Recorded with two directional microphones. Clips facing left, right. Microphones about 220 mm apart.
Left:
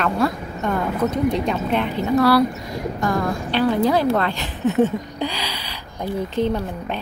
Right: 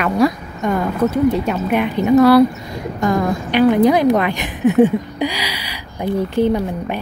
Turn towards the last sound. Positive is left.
turn(degrees=-10)  # may be behind; listen again after turning